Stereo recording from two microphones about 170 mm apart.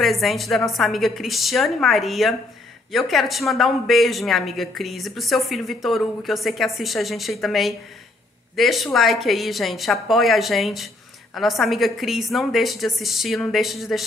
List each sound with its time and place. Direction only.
0.0 s speech: centre (ahead or behind)